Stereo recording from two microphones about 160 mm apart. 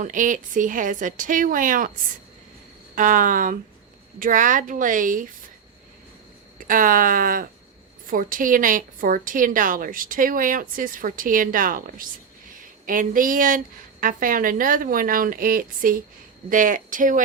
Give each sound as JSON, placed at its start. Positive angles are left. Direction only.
{"t": 0.0, "sound": "a woman's voice", "side_deg": -55}
{"t": 2.9, "sound": "a woman's voice", "side_deg": -55}
{"t": 6.6, "sound": "a woman's voice", "side_deg": -60}